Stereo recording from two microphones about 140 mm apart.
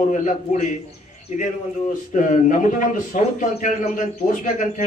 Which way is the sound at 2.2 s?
65° left (ahead or behind).